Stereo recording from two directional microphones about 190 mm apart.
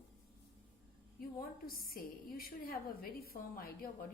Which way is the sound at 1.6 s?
50° left (ahead or behind).